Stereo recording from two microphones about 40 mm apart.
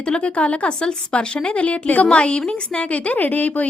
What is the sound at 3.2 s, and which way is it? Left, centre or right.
Speech, left.